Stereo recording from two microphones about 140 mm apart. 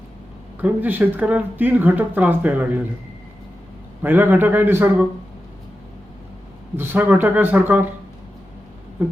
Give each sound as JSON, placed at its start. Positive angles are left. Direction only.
{"t": 0.6, "sound": "speech", "side_deg": -15}
{"t": 4.0, "sound": "speech", "side_deg": -15}
{"t": 6.7, "sound": "speech", "side_deg": -15}
{"t": 9.0, "sound": "speech", "side_deg": -15}